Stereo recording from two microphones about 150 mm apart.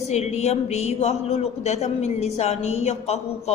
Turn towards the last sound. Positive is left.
turn(degrees=45)  # may be behind; listen again after turning